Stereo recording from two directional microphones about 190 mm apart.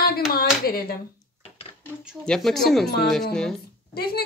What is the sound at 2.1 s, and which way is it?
A woman's voice, centre (ahead or behind).